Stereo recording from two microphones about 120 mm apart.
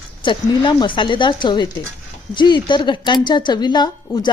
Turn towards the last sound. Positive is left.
turn(degrees=35)  # may be behind; listen again after turning